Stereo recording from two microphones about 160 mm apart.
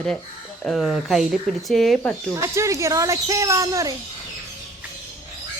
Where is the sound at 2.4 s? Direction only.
20° right (ahead or behind).